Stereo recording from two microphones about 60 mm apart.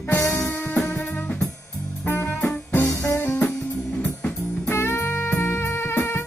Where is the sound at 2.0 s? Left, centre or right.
Left.